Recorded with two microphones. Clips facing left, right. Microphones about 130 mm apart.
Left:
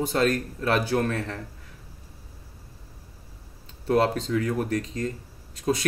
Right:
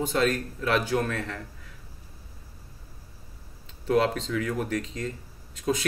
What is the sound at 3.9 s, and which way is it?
Speech, 35° left (ahead or behind).